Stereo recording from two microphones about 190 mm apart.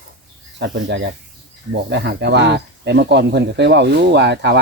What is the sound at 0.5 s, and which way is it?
Speech, 65° right (ahead or behind).